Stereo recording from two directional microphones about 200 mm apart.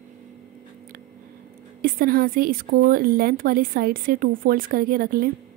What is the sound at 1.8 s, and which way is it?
A woman's voice, 45° right (ahead or behind).